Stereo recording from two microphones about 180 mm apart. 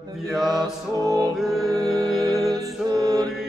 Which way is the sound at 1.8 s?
20° right (ahead or behind).